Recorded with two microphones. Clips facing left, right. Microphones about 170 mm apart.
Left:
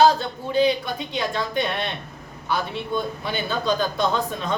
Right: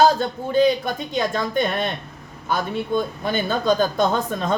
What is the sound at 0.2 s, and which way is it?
Speech, 45° right (ahead or behind).